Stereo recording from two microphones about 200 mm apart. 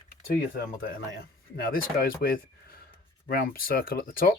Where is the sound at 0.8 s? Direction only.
45° left (ahead or behind).